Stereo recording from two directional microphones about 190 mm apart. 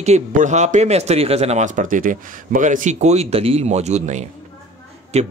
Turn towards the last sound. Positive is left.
turn(degrees=-35)  # may be behind; listen again after turning